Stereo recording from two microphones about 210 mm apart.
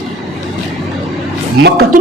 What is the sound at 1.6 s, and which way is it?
Speech, 50° right (ahead or behind).